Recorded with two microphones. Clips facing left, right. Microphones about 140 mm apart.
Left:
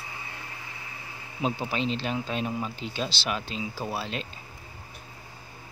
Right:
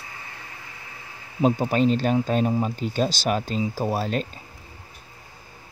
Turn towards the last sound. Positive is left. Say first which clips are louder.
# right 7 dB
turn(degrees=-45)  # may be behind; listen again after turning